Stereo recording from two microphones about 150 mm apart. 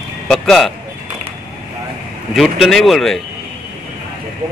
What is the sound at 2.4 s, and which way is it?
Speech, centre (ahead or behind).